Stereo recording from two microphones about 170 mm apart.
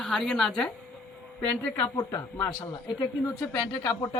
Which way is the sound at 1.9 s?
25° left (ahead or behind).